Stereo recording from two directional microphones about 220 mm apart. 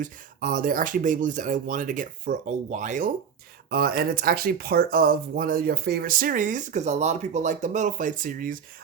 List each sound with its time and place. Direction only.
0.0 s speech: 40° right (ahead or behind)